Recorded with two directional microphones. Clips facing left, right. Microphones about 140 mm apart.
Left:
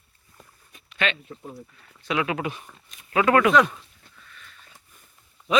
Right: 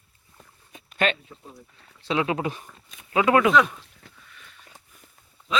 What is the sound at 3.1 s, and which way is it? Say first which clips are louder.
Speech: even; 15° right (ahead or behind).